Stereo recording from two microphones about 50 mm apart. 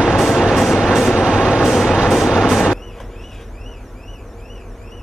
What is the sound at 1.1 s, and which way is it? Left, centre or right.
Vehicle, right.